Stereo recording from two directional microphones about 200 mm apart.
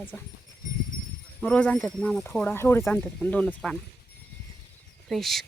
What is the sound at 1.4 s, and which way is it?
Speech, 5° left (ahead or behind).